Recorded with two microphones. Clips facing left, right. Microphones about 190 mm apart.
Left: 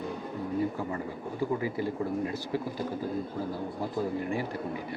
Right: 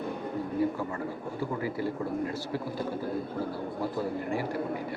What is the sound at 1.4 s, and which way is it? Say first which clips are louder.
Speech: left 2 dB; 15° left (ahead or behind).